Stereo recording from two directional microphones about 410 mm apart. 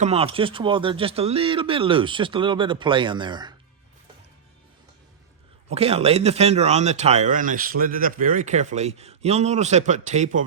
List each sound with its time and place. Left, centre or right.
0.0 s speech: centre
5.6 s speech: centre